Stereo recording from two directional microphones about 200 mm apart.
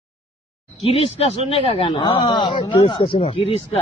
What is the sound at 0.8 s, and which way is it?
Speech, 25° left (ahead or behind).